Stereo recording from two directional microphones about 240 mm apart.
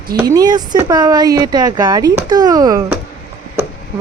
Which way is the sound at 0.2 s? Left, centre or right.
Centre.